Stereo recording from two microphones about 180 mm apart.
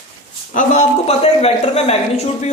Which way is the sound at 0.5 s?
40° left (ahead or behind).